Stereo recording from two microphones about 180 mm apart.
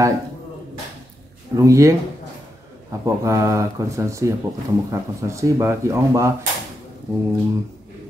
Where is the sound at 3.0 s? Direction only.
15° right (ahead or behind).